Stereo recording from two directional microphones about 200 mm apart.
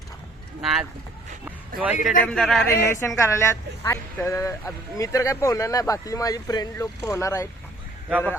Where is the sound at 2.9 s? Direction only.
15° left (ahead or behind).